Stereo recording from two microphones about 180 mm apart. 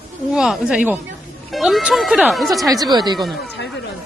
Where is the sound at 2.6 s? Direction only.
20° right (ahead or behind).